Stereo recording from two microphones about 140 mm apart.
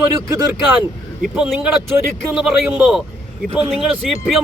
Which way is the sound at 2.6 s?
10° right (ahead or behind).